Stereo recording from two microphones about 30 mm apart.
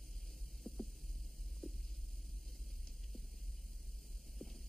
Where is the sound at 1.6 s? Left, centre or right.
Centre.